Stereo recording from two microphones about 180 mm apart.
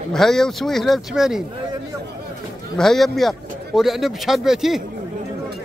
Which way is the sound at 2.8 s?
Centre (ahead or behind).